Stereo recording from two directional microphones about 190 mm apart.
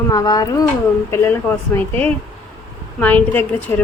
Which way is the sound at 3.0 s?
10° left (ahead or behind).